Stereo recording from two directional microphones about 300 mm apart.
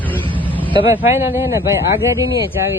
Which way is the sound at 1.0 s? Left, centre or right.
Centre.